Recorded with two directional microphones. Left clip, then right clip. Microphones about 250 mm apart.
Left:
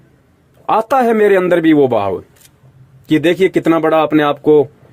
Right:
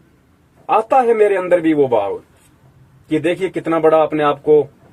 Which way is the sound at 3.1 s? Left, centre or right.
Left.